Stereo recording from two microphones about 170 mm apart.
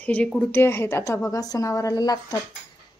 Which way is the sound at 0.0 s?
5° left (ahead or behind).